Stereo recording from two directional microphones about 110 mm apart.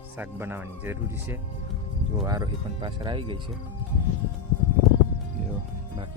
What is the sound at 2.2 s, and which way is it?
Speech, 35° right (ahead or behind).